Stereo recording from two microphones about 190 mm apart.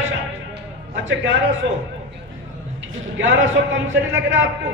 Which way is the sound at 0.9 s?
75° right (ahead or behind).